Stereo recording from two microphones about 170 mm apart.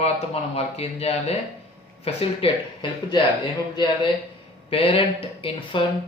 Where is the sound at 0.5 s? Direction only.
35° left (ahead or behind).